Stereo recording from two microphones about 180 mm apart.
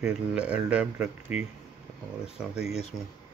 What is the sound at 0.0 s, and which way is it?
Speech, 5° right (ahead or behind).